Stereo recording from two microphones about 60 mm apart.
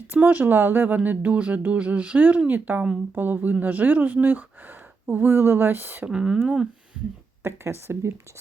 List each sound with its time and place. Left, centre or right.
0.1 s speech: right
6.1 s speech: centre
7.4 s speech: right